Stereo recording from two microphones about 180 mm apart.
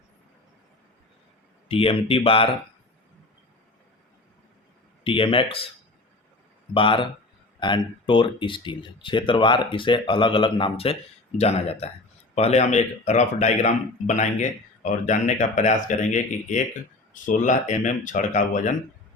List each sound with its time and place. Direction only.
1.6 s speech: 30° left (ahead or behind)
5.0 s speech: 30° left (ahead or behind)
6.7 s speech: 30° left (ahead or behind)